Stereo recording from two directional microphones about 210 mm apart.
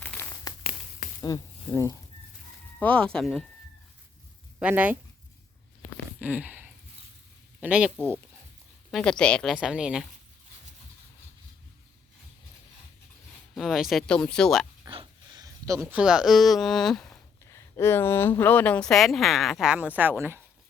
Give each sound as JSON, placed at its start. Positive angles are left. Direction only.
{"t": 0.0, "sound": "crumpling", "side_deg": 10}
{"t": 0.7, "sound": "a sound", "side_deg": 40}
{"t": 1.2, "sound": "speech", "side_deg": 15}
{"t": 2.7, "sound": "a woman's voice", "side_deg": 5}
{"t": 4.6, "sound": "speech", "side_deg": -10}
{"t": 6.1, "sound": "a sound", "side_deg": -5}
{"t": 7.6, "sound": "a woman's voice", "side_deg": -5}
{"t": 13.5, "sound": "a woman's voice", "side_deg": 0}
{"t": 14.8, "sound": "speech", "side_deg": -20}